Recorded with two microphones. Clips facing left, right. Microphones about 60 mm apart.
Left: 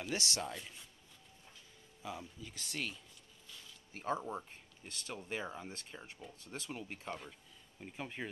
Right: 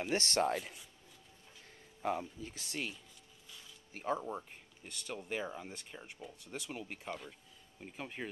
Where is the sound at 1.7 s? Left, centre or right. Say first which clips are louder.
Right 9 dB; right.